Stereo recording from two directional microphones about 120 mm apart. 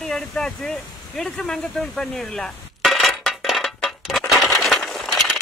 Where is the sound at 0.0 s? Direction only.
5° left (ahead or behind).